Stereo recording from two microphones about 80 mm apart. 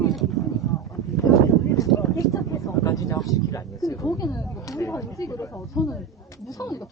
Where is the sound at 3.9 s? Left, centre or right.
Left.